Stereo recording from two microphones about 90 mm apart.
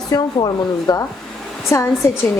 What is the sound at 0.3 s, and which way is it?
Speech, 50° left (ahead or behind).